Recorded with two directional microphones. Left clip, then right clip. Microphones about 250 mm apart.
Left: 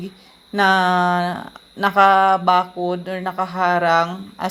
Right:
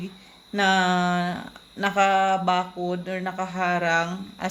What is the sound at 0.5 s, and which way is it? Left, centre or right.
Speech, centre.